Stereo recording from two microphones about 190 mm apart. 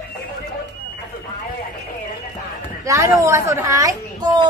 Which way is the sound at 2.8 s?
15° right (ahead or behind).